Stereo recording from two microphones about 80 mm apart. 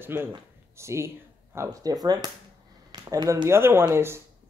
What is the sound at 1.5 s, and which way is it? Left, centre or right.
Speech, right.